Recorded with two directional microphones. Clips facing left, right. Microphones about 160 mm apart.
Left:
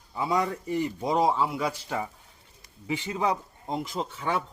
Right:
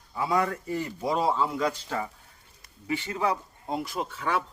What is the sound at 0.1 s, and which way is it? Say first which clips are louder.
A man's voice: even; 20° left (ahead or behind).